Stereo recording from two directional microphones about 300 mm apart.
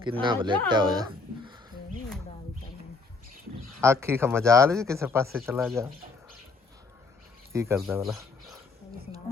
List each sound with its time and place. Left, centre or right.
0.0 s speech: centre
3.8 s speech: centre
7.5 s speech: centre